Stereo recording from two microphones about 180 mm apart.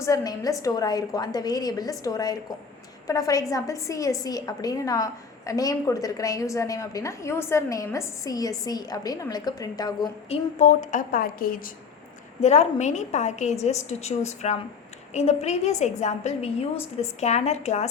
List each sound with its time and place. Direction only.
0.0 s a woman's voice: 20° left (ahead or behind)
10.2 s a woman's voice: 40° left (ahead or behind)
12.4 s a woman's voice: 40° left (ahead or behind)